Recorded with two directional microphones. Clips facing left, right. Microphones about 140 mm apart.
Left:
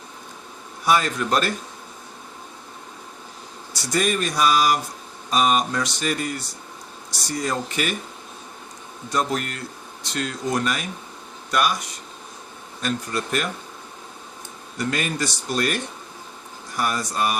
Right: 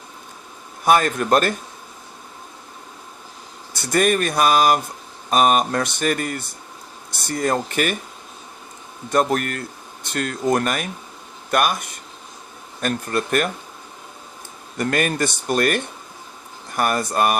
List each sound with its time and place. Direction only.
0.9 s speech: 50° right (ahead or behind)
3.7 s speech: 55° right (ahead or behind)
9.0 s speech: 50° right (ahead or behind)
14.8 s speech: 55° right (ahead or behind)